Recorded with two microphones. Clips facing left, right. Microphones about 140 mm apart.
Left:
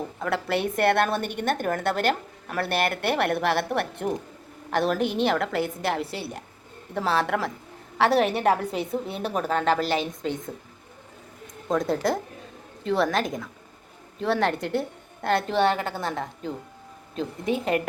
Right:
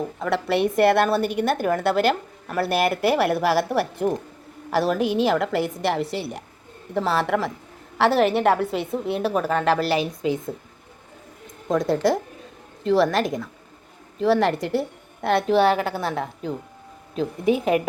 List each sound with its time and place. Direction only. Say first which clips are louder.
0.2 s a woman's voice: right 4 dB; centre (ahead or behind)
11.7 s a woman's voice: right 4 dB; centre (ahead or behind)